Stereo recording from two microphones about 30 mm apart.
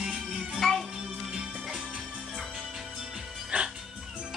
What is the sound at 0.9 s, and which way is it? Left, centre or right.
Music, right.